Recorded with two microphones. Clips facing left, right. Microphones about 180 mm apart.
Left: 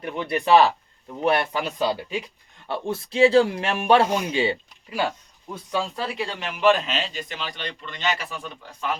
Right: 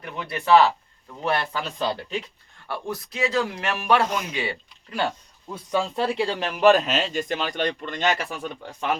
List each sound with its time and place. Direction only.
0.0 s speech: 20° left (ahead or behind)
2.6 s speech: 25° left (ahead or behind)
4.9 s speech: 10° left (ahead or behind)
6.0 s speech: 35° right (ahead or behind); by 9.0 s 55° right (ahead or behind)